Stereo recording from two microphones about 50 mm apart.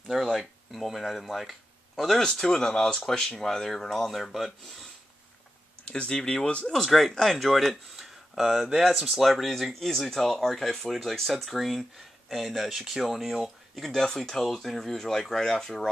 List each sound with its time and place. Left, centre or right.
0.1 s speech: centre
2.2 s speech: centre
5.9 s speech: centre
6.7 s speech: centre